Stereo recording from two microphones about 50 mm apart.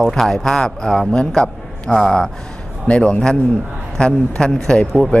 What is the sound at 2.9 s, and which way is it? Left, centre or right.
A man's voice, left.